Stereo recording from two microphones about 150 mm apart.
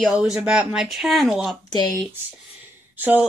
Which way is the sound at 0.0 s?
5° right (ahead or behind).